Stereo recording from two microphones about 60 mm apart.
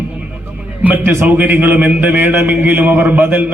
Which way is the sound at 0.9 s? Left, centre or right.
Right.